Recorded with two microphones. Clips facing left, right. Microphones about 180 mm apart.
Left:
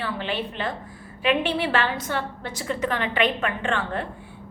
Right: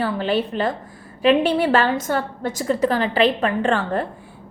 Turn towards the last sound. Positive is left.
turn(degrees=-40)  # may be behind; listen again after turning